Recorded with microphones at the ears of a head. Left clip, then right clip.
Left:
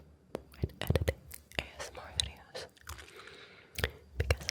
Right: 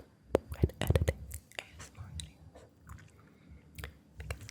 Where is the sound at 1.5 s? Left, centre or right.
Left.